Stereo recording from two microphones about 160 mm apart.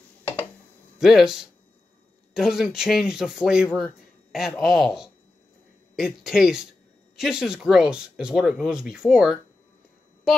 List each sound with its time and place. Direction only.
0.9 s speech: 5° right (ahead or behind)